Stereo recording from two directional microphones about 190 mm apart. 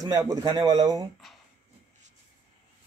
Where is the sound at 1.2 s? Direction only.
Centre (ahead or behind).